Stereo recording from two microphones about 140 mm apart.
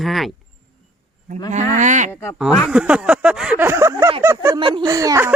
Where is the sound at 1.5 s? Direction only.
60° right (ahead or behind).